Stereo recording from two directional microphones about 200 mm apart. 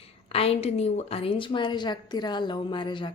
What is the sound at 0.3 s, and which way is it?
Speech, 30° left (ahead or behind).